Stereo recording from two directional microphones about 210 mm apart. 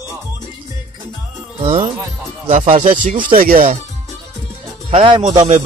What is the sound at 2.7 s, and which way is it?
Speech, 40° right (ahead or behind).